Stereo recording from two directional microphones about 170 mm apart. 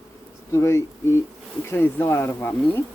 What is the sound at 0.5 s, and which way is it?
Speech, 15° left (ahead or behind).